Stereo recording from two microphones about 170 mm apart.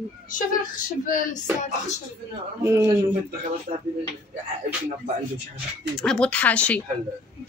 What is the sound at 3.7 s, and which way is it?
Speech, 45° right (ahead or behind).